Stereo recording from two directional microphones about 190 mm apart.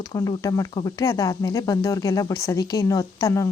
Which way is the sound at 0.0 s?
20° left (ahead or behind).